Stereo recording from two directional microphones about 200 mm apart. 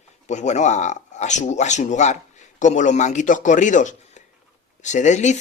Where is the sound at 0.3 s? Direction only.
35° left (ahead or behind).